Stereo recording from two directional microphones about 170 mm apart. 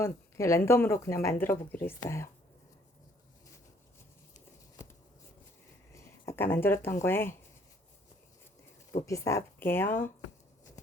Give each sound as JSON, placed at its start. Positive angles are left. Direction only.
{"t": 0.0, "sound": "speech", "side_deg": 15}
{"t": 5.9, "sound": "a sound", "side_deg": 15}
{"t": 7.0, "sound": "speech", "side_deg": 15}
{"t": 9.0, "sound": "speech", "side_deg": 20}